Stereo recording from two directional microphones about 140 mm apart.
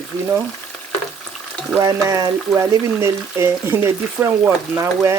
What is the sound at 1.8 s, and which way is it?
Speech, 25° right (ahead or behind).